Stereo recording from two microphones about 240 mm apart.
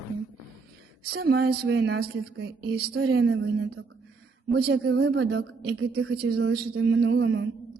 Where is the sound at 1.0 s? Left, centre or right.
Right.